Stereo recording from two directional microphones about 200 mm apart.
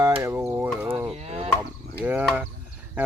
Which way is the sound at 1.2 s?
30° right (ahead or behind).